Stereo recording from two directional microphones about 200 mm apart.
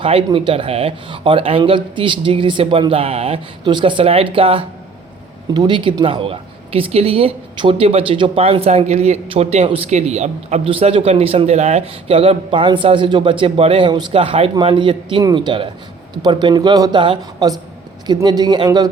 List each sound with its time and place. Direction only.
0.0 s speech: 25° right (ahead or behind)